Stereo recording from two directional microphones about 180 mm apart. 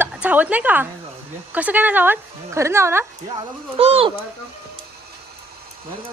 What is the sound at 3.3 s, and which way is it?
Speech, 30° right (ahead or behind).